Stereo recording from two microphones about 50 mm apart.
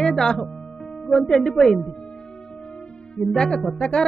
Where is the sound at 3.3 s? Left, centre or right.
Centre.